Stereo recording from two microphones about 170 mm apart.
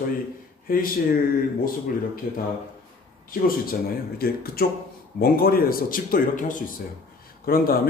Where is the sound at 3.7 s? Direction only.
60° left (ahead or behind).